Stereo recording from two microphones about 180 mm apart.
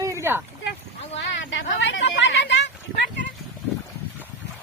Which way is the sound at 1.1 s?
90° left.